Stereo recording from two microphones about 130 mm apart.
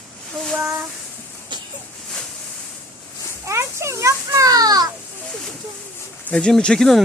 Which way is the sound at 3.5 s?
20° right (ahead or behind).